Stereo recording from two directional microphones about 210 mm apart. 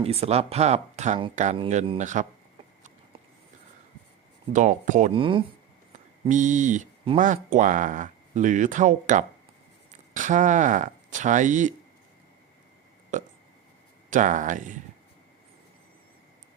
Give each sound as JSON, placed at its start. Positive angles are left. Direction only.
{"t": 0.0, "sound": "speech", "side_deg": -30}
{"t": 4.5, "sound": "speech", "side_deg": -35}
{"t": 5.2, "sound": "speech", "side_deg": -25}
{"t": 6.2, "sound": "speech", "side_deg": -35}
{"t": 13.1, "sound": "speech", "side_deg": -35}